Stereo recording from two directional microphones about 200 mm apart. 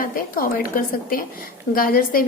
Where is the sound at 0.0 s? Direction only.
45° left (ahead or behind).